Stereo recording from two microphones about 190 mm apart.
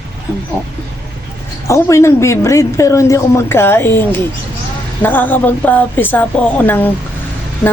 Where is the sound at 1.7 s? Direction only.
15° left (ahead or behind).